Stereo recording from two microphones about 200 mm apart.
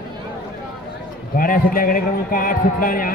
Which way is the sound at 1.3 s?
45° left (ahead or behind).